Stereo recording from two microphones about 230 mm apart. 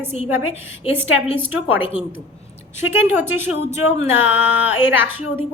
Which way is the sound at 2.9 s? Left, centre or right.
Centre.